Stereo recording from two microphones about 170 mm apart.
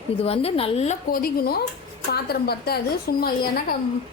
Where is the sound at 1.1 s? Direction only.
60° left (ahead or behind).